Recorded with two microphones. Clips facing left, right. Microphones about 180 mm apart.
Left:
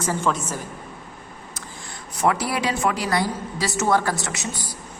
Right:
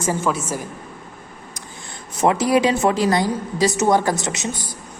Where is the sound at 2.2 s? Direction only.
20° right (ahead or behind).